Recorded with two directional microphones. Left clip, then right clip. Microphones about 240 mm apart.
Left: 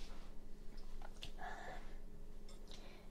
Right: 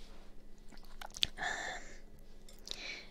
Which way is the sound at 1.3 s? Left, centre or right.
Right.